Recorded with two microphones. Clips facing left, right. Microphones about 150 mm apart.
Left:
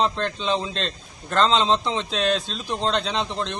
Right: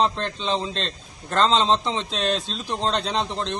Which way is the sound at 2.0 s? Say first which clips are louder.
Left 2 dB; 35° right (ahead or behind).